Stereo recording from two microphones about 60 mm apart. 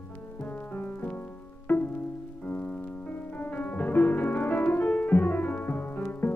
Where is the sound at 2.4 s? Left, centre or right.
Left.